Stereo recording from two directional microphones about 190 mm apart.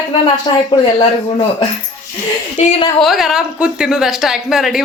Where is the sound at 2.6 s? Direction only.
35° left (ahead or behind).